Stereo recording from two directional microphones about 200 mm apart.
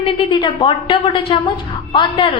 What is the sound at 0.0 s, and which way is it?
A woman's voice, 25° left (ahead or behind).